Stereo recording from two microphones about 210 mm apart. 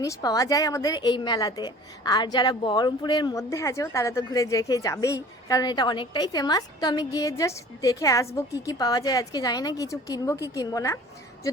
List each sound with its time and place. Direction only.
0.0 s a woman's voice: 15° left (ahead or behind)